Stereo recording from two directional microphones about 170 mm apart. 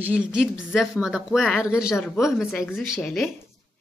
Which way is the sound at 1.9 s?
10° left (ahead or behind).